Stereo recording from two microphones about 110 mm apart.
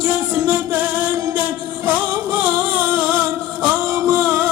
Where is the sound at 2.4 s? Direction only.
15° right (ahead or behind).